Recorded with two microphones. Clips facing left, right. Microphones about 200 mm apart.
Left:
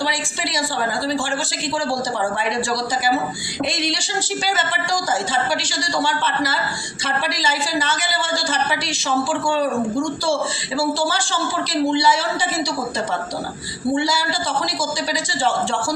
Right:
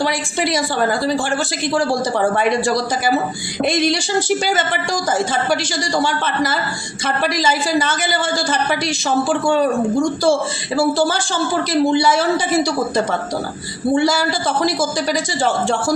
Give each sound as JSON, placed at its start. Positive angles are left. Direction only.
{"t": 0.0, "sound": "a sound", "side_deg": -50}
{"t": 2.3, "sound": "a man's voice", "side_deg": -50}
{"t": 13.9, "sound": "a man's voice", "side_deg": -50}